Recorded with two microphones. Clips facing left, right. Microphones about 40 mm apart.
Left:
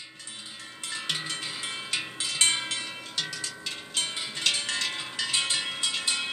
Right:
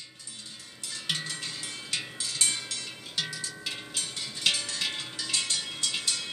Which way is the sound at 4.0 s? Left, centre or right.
Left.